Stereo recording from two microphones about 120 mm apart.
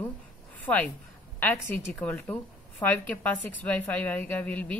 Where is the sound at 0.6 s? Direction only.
15° left (ahead or behind).